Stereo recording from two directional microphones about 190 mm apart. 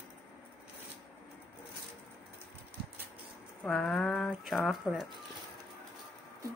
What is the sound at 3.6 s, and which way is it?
Speech, 5° left (ahead or behind).